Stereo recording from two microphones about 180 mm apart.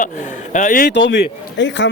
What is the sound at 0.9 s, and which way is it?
Speech, 75° left (ahead or behind).